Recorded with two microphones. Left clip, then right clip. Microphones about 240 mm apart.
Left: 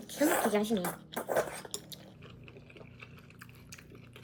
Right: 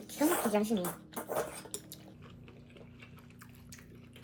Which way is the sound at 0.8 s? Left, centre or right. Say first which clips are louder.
Left 2 dB; centre.